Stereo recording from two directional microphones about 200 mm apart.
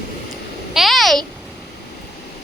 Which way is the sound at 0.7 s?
Centre (ahead or behind).